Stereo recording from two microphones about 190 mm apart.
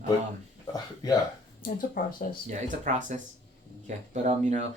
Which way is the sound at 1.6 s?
45° left (ahead or behind).